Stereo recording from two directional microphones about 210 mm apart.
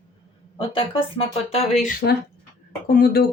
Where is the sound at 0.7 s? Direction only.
25° left (ahead or behind).